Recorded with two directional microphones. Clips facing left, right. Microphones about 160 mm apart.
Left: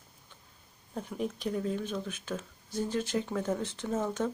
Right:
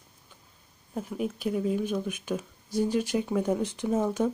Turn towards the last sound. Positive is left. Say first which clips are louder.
# right 5 dB
turn(degrees=-10)  # may be behind; listen again after turning